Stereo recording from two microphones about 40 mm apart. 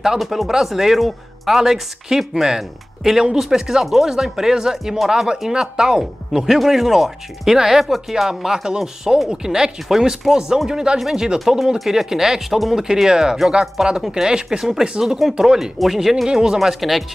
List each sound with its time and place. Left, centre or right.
0.2 s speech: centre
11.3 s speech: centre
12.8 s speech: centre
16.3 s speech: centre
16.5 s speech: centre